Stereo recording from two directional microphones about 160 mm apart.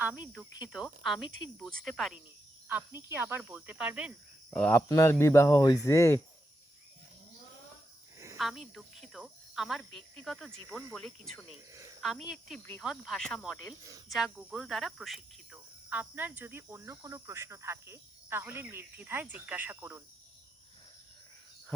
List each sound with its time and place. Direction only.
0.4 s speech: 5° right (ahead or behind)
2.6 s cricket: 15° right (ahead or behind)
4.5 s speech: 5° left (ahead or behind)
4.9 s speech: 20° left (ahead or behind)
8.4 s speech: centre (ahead or behind)
11.7 s speech: 20° right (ahead or behind)
12.0 s speech: centre (ahead or behind)
14.3 s cricket: centre (ahead or behind)